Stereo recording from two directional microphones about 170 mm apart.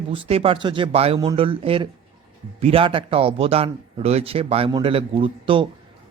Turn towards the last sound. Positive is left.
turn(degrees=-30)  # may be behind; listen again after turning